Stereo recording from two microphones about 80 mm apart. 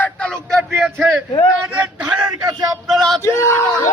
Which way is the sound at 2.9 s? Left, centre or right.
Centre.